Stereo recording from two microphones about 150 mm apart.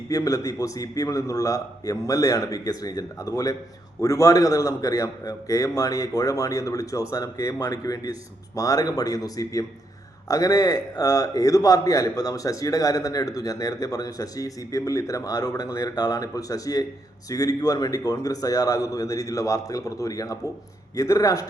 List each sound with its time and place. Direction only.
0.1 s a man's voice: 25° left (ahead or behind)